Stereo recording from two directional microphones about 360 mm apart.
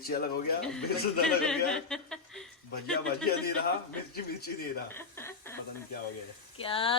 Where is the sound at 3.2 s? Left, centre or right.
Left.